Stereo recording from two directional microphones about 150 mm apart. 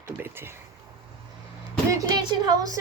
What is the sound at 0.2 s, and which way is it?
Speech, 15° right (ahead or behind).